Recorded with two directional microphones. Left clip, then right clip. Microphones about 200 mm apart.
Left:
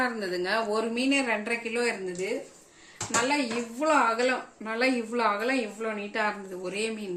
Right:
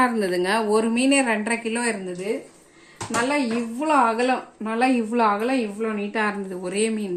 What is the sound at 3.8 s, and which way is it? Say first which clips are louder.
A woman's voice: right 4 dB; 35° right (ahead or behind).